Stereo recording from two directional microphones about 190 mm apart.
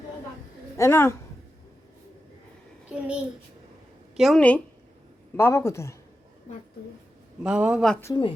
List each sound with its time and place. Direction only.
0.8 s speech: 15° left (ahead or behind)
2.9 s a child's voice: 5° right (ahead or behind)
4.2 s speech: 5° left (ahead or behind)
7.4 s a man's voice: 5° right (ahead or behind)
8.0 s a woman's voice: 25° left (ahead or behind)